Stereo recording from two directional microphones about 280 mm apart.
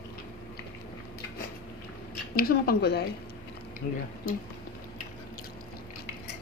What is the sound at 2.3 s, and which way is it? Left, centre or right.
Speech, left.